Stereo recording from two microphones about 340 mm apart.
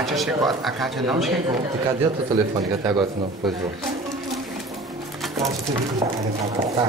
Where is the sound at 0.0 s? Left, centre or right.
Centre.